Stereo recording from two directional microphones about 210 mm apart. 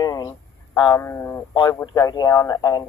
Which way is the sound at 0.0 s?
15° left (ahead or behind).